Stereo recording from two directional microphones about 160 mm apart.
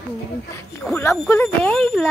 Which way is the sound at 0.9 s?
15° left (ahead or behind).